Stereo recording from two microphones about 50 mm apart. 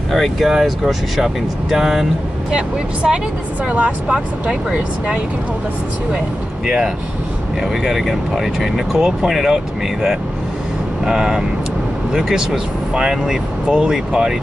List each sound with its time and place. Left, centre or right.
0.1 s speech: centre
6.6 s speech: centre
11.1 s speech: centre